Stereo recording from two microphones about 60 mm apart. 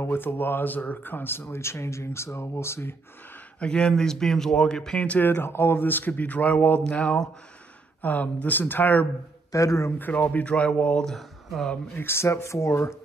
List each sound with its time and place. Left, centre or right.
0.0 s speech: left
3.5 s speech: centre
4.9 s speech: left
5.3 s speech: left
7.0 s speech: centre
8.0 s speech: left
9.5 s speech: left
9.8 s speech: left
10.3 s speech: centre
11.1 s speech: centre
12.0 s speech: left